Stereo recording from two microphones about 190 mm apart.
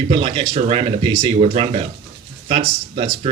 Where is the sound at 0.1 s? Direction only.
30° right (ahead or behind).